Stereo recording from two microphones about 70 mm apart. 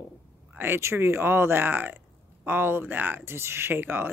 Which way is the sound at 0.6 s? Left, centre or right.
Right.